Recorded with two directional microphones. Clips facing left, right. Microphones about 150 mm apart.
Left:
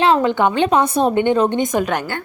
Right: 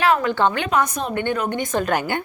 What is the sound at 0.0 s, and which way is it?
A woman's voice, 25° left (ahead or behind).